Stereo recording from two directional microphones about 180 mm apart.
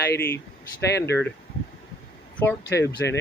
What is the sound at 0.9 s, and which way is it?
Speech, 70° left (ahead or behind).